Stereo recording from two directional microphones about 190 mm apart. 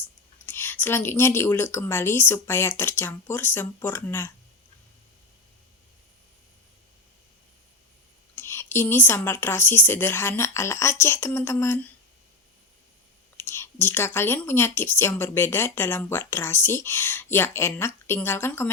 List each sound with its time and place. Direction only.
0.4 s speech: 10° left (ahead or behind)
8.4 s speech: 15° left (ahead or behind)
13.3 s speech: 10° left (ahead or behind)